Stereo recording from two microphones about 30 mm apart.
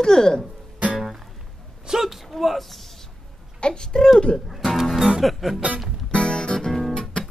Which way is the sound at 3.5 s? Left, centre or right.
Left.